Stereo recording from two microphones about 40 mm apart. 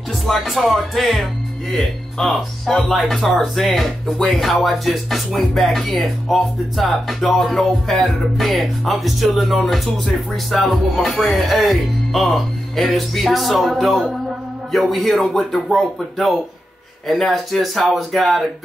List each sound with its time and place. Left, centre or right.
0.1 s speech: centre
17.1 s speech: centre